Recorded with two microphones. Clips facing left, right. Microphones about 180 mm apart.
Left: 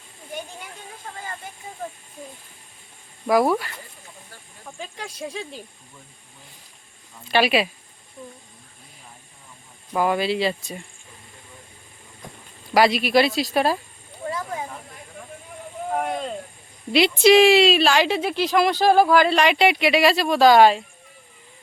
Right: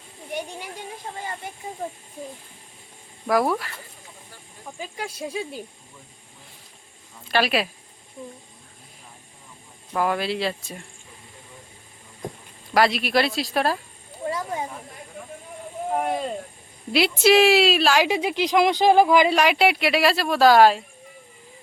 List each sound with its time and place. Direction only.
1.1 s speech: 25° right (ahead or behind)
3.2 s speech: centre (ahead or behind)
7.3 s speech: centre (ahead or behind)
9.9 s speech: centre (ahead or behind)
12.7 s speech: centre (ahead or behind)
14.3 s snake: 30° right (ahead or behind)
15.9 s speech: 5° right (ahead or behind)